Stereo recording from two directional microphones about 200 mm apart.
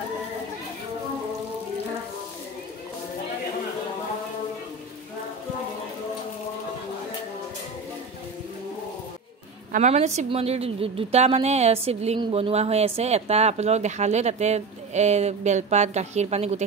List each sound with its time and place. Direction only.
9.7 s a woman's voice: 35° right (ahead or behind)